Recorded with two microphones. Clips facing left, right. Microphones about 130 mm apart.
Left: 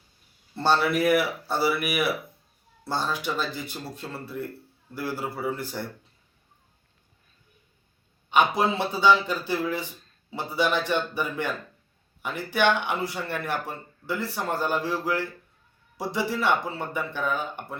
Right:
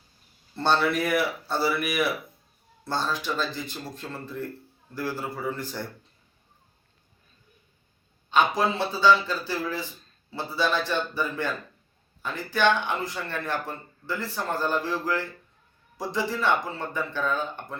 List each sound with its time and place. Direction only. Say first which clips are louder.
0.5 s speech: left 1 dB; 5° left (ahead or behind)
8.3 s speech: left 1 dB; 15° left (ahead or behind)